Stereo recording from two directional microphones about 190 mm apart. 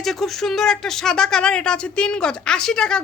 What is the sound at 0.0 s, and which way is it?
A woman's voice, centre (ahead or behind).